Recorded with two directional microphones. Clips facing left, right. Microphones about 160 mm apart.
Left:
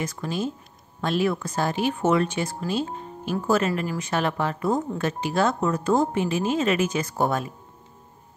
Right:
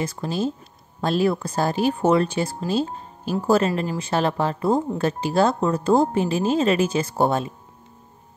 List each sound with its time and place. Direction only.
0.0 s speech: 30° right (ahead or behind)